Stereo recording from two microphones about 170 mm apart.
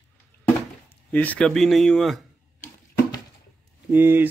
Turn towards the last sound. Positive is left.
turn(degrees=-10)  # may be behind; listen again after turning